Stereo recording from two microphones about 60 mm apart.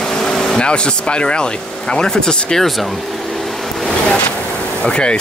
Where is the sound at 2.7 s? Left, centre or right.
Centre.